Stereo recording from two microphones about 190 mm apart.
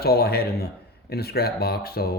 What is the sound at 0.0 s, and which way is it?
Speech, 55° left (ahead or behind).